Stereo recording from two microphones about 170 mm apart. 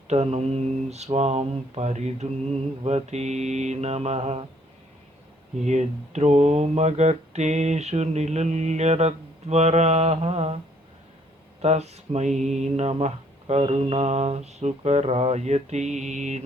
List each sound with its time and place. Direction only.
0.1 s speech: 40° right (ahead or behind)
5.5 s speech: 45° right (ahead or behind)
11.6 s speech: 40° right (ahead or behind)